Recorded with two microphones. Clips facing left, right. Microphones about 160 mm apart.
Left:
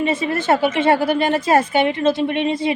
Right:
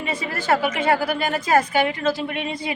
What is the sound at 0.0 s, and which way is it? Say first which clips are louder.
A woman's voice: left 8 dB; 25° left (ahead or behind).